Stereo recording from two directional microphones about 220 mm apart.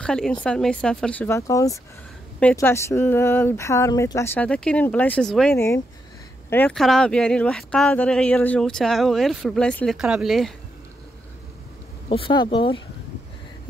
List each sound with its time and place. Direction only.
0.0 s speech: 5° left (ahead or behind)
12.1 s speech: 20° left (ahead or behind)